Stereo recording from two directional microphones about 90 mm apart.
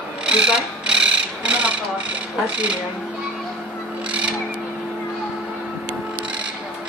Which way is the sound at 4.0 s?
10° right (ahead or behind).